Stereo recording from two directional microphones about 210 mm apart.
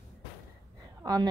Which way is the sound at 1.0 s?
20° right (ahead or behind).